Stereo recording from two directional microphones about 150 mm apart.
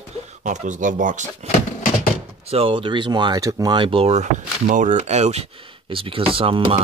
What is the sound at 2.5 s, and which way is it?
Speech, 35° right (ahead or behind).